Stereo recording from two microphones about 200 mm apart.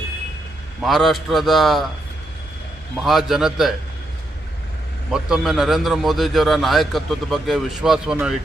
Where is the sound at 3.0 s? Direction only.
Centre (ahead or behind).